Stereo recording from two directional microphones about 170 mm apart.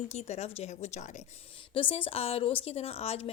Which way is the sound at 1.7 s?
30° left (ahead or behind).